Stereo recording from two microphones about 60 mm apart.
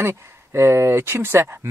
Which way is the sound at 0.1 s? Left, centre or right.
Right.